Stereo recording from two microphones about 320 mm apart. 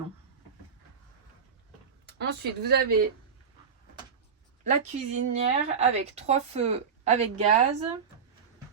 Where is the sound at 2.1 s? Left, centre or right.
Right.